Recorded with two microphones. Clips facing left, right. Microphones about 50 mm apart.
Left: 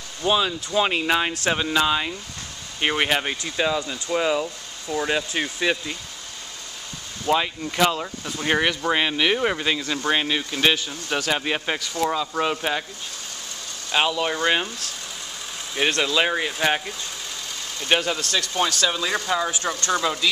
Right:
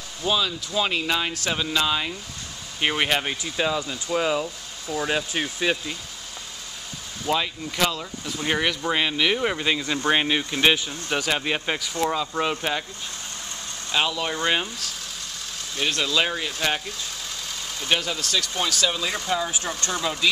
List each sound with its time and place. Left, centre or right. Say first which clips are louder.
0.3 s speech: left 3 dB; left; by 5.9 s centre
7.2 s speech: left 3 dB; centre
8.4 s speech: left 3 dB; centre
10.0 s speech: right 1 dB; centre
13.9 s speech: left 3 dB; centre
16.0 s speech: left 1 dB; centre
18.9 s speech: left 2 dB; centre